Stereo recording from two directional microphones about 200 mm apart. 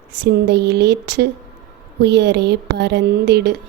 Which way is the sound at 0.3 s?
55° right (ahead or behind).